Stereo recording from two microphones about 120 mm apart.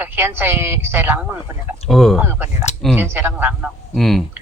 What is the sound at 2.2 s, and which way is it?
A woman's voice, 20° right (ahead or behind).